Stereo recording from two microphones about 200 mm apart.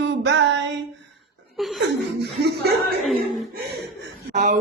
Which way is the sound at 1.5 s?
Centre (ahead or behind).